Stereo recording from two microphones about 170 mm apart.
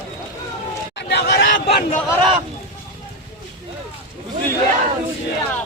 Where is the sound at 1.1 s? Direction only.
90° left.